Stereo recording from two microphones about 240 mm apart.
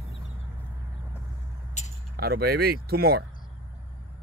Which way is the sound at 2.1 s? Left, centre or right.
Right.